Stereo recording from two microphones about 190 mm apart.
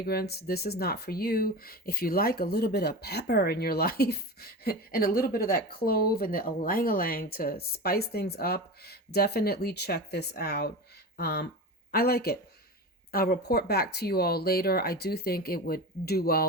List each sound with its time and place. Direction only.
0.0 s speech: 55° left (ahead or behind)